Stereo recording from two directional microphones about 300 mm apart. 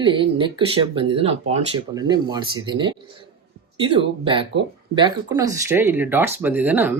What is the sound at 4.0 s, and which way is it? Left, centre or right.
Speech, centre.